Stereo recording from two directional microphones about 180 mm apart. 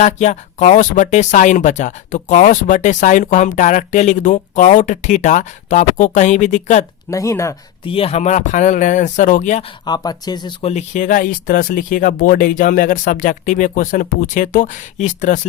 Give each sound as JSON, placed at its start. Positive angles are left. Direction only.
{"t": 0.0, "sound": "speech", "side_deg": 40}
{"t": 7.1, "sound": "speech", "side_deg": 15}
{"t": 7.9, "sound": "speech", "side_deg": 30}
{"t": 9.8, "sound": "speech", "side_deg": 20}